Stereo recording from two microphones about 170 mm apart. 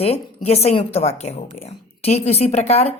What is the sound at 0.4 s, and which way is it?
Speech, 35° left (ahead or behind).